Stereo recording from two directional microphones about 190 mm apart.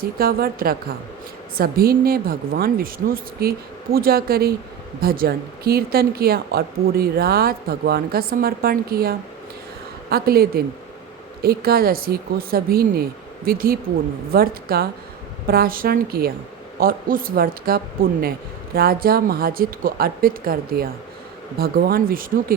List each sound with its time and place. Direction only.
0.0 s speech: 50° right (ahead or behind)